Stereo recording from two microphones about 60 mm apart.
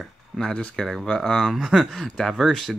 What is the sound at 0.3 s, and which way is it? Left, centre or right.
Speech, centre.